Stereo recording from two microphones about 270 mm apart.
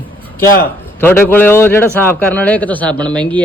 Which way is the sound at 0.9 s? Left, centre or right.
Centre.